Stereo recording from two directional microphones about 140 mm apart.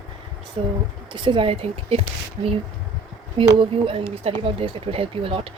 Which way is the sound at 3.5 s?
40° right (ahead or behind).